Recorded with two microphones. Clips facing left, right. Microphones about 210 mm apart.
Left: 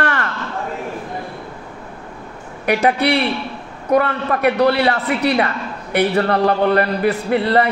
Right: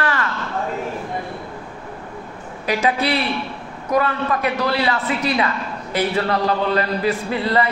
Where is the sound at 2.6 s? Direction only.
65° left (ahead or behind).